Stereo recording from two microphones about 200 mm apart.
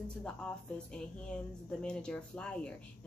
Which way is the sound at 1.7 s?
5° left (ahead or behind).